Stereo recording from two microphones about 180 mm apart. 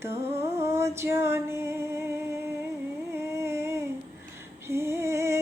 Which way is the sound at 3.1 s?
15° right (ahead or behind).